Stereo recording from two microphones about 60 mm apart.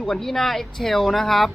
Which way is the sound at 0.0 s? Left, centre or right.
Centre.